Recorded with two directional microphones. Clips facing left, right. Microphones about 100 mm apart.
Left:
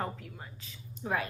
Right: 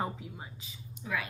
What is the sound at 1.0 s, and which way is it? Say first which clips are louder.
Speech: left 3 dB; 40° left (ahead or behind).